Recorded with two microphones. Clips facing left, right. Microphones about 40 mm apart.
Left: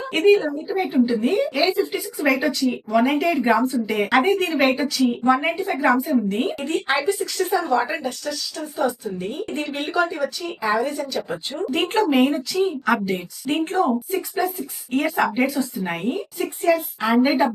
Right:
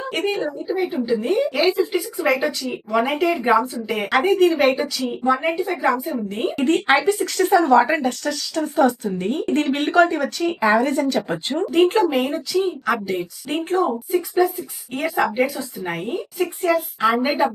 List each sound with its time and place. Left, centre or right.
0.1 s a woman's voice: centre
6.7 s a woman's voice: right
11.7 s a woman's voice: centre